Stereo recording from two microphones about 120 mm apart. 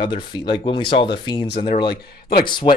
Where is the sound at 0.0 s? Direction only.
40° left (ahead or behind).